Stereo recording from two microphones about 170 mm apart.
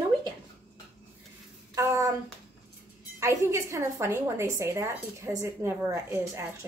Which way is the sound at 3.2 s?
20° right (ahead or behind).